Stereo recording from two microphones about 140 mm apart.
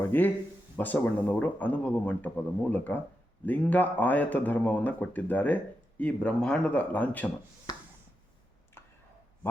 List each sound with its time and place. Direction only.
0.1 s a man's voice: 15° left (ahead or behind)
8.8 s whispering: 15° left (ahead or behind)